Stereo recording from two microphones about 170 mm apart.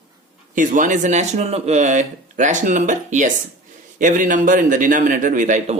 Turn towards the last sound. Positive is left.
turn(degrees=-50)  # may be behind; listen again after turning